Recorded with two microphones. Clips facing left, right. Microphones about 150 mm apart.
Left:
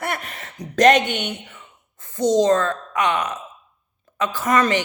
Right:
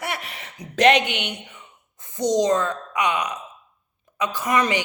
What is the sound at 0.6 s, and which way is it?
Speech, 40° left (ahead or behind).